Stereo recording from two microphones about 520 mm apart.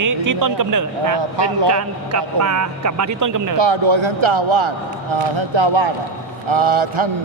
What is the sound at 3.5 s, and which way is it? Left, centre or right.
A man's voice, right.